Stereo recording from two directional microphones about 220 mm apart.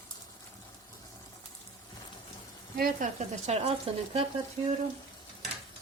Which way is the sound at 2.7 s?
40° right (ahead or behind).